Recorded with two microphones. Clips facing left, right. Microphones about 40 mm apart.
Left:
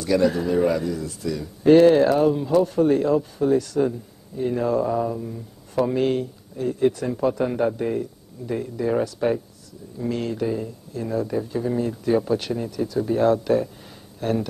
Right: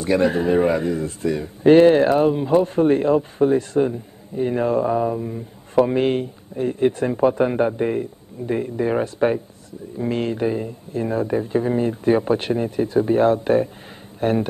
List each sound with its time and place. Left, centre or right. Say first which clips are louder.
0.0 s speech: right 2 dB; right